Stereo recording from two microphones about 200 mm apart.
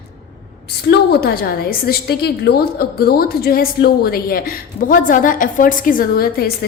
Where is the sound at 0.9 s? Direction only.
50° left (ahead or behind).